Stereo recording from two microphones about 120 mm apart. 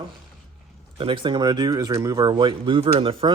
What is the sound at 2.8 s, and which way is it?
Speech, 50° right (ahead or behind).